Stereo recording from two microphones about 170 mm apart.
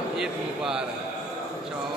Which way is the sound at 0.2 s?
5° right (ahead or behind).